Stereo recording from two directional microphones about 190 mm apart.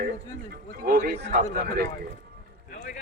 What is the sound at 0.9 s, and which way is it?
Speech, 45° right (ahead or behind).